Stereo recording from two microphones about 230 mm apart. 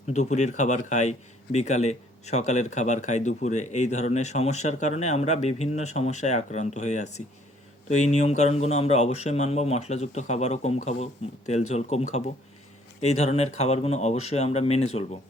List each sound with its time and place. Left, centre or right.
0.1 s a man's voice: left